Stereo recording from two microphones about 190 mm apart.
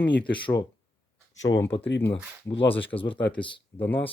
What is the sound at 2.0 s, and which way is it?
Speech, 15° left (ahead or behind).